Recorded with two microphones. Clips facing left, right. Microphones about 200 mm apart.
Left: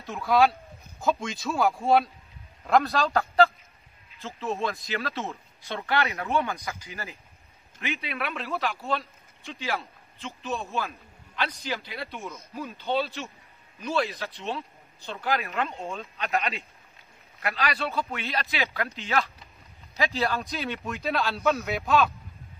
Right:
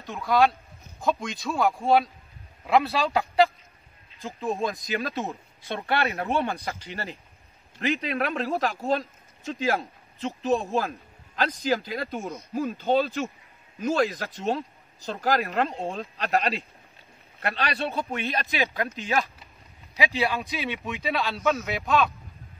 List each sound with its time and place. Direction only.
0.0 s speech: centre (ahead or behind); by 5.4 s 15° right (ahead or behind)
5.8 s speech: 30° right (ahead or behind)
11.4 s speech: 50° right (ahead or behind)
12.1 s speech: 35° right (ahead or behind)
12.5 s speech: 45° right (ahead or behind)
17.7 s speech: 20° right (ahead or behind)
20.4 s speech: centre (ahead or behind)